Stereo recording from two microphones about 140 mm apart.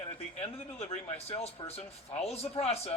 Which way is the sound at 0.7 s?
50° left (ahead or behind).